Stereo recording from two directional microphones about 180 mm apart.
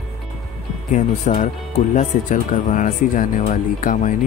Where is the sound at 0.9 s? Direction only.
45° left (ahead or behind).